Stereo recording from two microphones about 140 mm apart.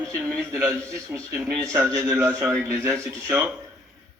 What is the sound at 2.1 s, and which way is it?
Speech, 15° right (ahead or behind).